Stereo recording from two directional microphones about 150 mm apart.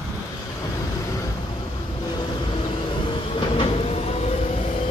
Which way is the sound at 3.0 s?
35° left (ahead or behind).